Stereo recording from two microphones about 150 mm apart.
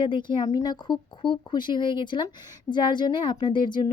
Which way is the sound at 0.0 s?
35° left (ahead or behind).